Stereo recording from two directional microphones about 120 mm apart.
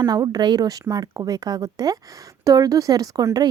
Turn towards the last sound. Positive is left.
turn(degrees=-30)  # may be behind; listen again after turning